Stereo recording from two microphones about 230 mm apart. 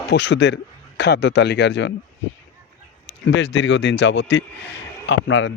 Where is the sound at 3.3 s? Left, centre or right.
Left.